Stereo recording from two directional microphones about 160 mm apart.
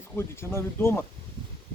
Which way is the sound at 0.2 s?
15° left (ahead or behind).